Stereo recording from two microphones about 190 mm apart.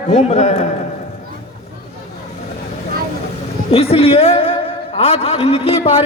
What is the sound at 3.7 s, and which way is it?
A man's voice, 30° left (ahead or behind).